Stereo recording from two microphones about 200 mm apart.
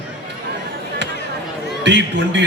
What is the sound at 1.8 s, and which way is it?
Speech, 60° right (ahead or behind).